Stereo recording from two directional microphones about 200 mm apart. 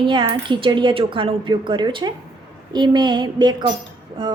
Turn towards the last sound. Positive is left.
turn(degrees=-25)  # may be behind; listen again after turning